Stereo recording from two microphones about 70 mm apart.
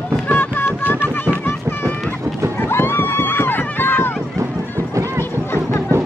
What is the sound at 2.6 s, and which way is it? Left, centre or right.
Run, left.